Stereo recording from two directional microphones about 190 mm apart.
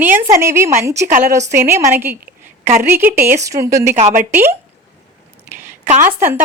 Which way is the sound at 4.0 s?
40° right (ahead or behind).